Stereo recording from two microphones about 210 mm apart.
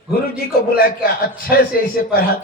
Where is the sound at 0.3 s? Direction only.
45° left (ahead or behind).